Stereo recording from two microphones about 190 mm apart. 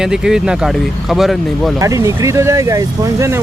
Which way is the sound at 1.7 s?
15° right (ahead or behind).